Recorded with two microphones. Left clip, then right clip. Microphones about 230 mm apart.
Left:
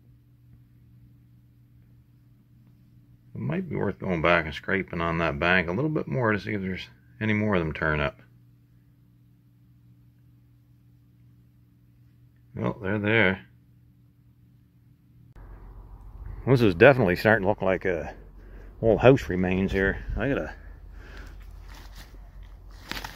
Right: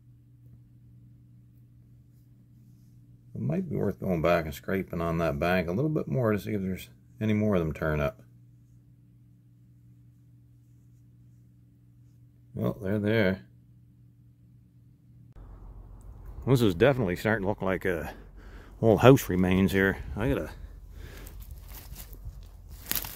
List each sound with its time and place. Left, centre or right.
3.3 s speech: centre
12.5 s speech: centre
16.4 s speech: centre
18.6 s speech: right
20.2 s speech: centre